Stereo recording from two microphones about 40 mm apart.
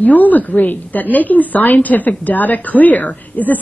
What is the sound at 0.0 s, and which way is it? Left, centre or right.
A woman's voice, left.